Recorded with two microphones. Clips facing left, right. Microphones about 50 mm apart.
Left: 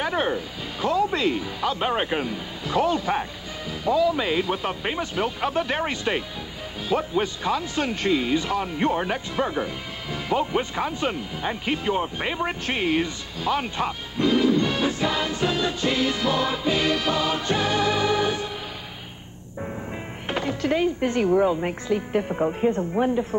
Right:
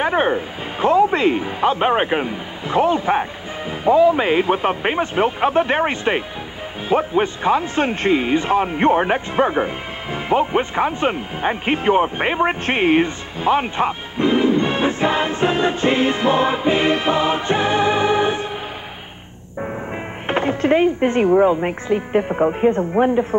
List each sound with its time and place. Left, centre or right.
0.0 s speech: right
19.6 s speech: right